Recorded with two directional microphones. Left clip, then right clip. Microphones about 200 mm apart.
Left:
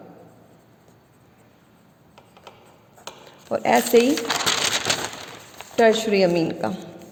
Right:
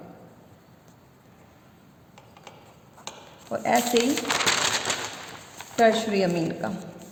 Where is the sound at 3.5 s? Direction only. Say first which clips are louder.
Left 4 dB; 40° left (ahead or behind).